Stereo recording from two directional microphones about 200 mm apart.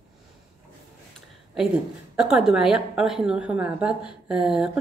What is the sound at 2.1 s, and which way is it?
A woman's voice, 5° right (ahead or behind).